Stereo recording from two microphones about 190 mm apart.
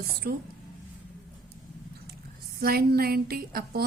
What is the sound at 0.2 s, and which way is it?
Speech, 50° right (ahead or behind).